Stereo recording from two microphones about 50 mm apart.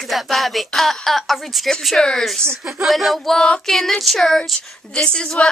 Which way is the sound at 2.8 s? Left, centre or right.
Centre.